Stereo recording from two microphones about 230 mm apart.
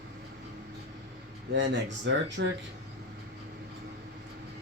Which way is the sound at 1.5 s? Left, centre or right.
Right.